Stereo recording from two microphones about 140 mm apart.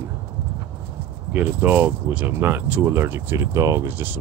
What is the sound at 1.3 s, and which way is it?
Speech, 15° right (ahead or behind).